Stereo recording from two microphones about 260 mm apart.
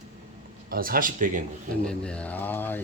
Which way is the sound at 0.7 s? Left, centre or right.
Right.